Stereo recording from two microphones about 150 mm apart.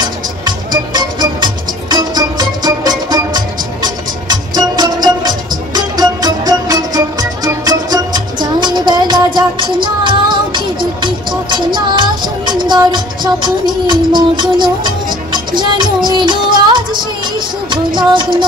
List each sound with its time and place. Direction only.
0.7 s music: 30° right (ahead or behind)